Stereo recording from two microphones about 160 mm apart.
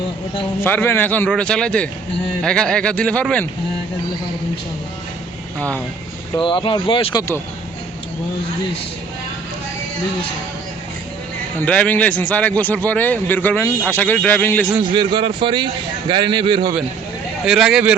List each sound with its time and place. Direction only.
0.6 s a man's voice: 15° left (ahead or behind)
5.5 s a man's voice: 10° left (ahead or behind)
6.3 s speech: 30° left (ahead or behind)
11.6 s a man's voice: 10° left (ahead or behind)
14.9 s a man's voice: 30° right (ahead or behind)
17.4 s speech: 5° right (ahead or behind)